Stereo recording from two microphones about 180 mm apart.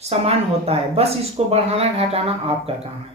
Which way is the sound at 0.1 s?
35° right (ahead or behind).